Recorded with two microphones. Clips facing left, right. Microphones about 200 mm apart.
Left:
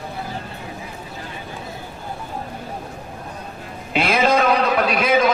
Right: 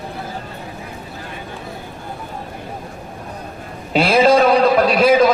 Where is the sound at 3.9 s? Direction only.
35° right (ahead or behind).